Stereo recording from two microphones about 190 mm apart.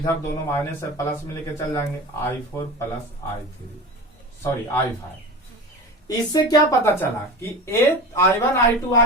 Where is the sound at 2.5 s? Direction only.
15° left (ahead or behind).